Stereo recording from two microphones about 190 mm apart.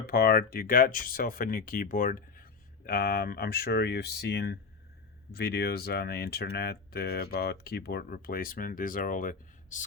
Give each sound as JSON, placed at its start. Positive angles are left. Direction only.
{"t": 0.0, "sound": "speech", "side_deg": 55}